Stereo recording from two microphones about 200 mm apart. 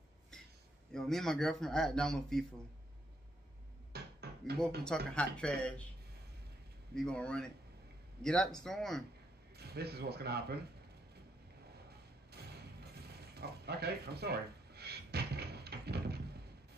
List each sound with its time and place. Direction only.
0.9 s a man's voice: centre (ahead or behind)
3.9 s a sound: 55° right (ahead or behind)
4.8 s a man's voice: 5° left (ahead or behind)
7.0 s a man's voice: 5° left (ahead or behind)
9.6 s speech: 55° right (ahead or behind)
11.9 s music: 55° right (ahead or behind)